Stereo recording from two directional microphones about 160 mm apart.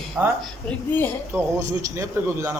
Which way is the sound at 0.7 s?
15° left (ahead or behind).